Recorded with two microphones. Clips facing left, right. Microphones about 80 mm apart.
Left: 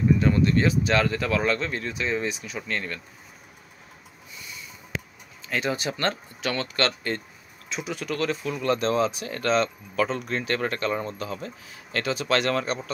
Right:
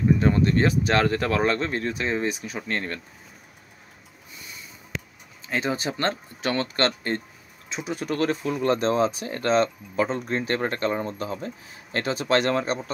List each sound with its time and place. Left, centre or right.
0.2 s speech: right
5.5 s speech: right